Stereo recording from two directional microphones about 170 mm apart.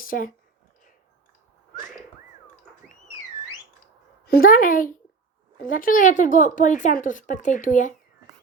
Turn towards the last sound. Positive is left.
turn(degrees=50)  # may be behind; listen again after turning